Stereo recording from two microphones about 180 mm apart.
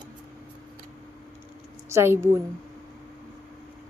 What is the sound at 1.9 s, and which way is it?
Speech, 15° right (ahead or behind).